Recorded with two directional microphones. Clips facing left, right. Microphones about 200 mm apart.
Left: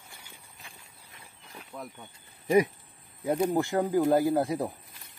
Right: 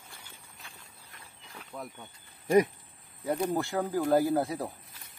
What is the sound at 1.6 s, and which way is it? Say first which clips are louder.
Speech: even; 5° left (ahead or behind).